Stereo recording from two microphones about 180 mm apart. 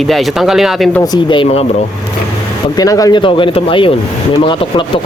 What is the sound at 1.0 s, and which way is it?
Speech, 25° left (ahead or behind).